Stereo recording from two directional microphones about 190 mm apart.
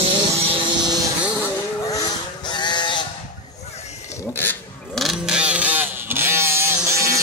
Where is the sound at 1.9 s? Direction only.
20° left (ahead or behind).